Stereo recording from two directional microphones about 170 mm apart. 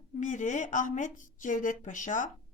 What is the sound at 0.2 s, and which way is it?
A woman's voice, 45° left (ahead or behind).